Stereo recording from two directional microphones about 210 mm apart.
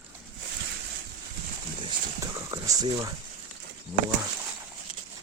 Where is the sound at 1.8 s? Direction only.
20° right (ahead or behind).